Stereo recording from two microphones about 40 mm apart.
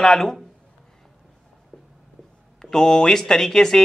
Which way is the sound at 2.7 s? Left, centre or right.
Centre.